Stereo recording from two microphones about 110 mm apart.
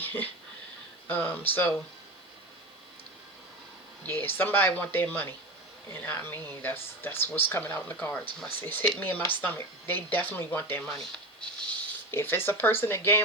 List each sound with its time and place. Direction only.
0.0 s a sound: 15° left (ahead or behind)
1.0 s speech: 15° left (ahead or behind)
4.0 s speech: 20° left (ahead or behind)